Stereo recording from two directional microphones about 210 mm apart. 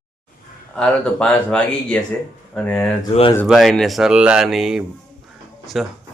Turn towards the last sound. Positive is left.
turn(degrees=0)  # may be behind; listen again after turning